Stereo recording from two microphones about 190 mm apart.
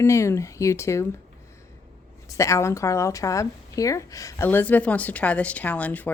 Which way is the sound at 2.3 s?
15° left (ahead or behind).